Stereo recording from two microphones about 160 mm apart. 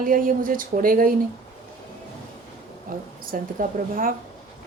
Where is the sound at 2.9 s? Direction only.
65° right (ahead or behind).